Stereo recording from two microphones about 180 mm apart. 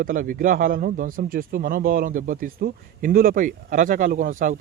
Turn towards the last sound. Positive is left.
turn(degrees=-50)  # may be behind; listen again after turning